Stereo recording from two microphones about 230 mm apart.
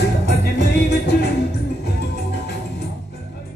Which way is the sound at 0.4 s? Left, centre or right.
Left.